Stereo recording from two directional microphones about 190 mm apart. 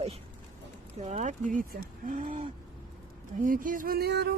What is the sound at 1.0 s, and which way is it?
Speech, 35° right (ahead or behind).